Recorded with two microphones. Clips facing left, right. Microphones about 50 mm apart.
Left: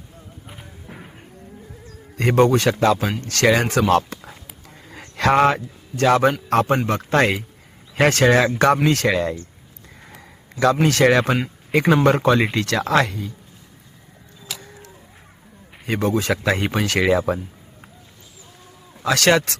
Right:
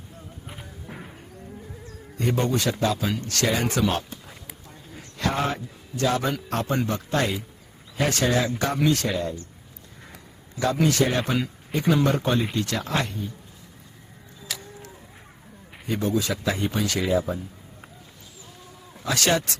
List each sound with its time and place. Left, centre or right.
0.4 s a sound: centre
2.1 s speech: left
4.7 s a sound: left
6.5 s a man's voice: left
6.7 s speech: left
10.8 s speech: left
15.9 s speech: left
19.0 s speech: left